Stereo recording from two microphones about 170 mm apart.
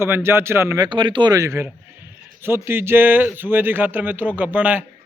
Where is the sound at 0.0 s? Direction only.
15° right (ahead or behind).